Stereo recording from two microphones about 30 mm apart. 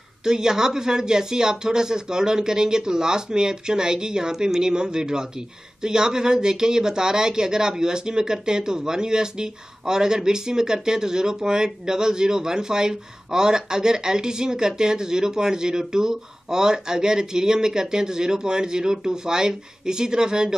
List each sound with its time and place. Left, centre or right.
0.2 s speech: right